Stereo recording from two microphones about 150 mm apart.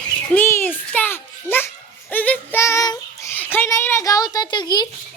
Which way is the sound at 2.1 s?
10° left (ahead or behind).